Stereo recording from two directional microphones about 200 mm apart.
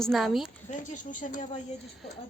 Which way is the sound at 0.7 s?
40° left (ahead or behind).